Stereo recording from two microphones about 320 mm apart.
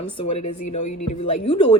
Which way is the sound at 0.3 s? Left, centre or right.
Left.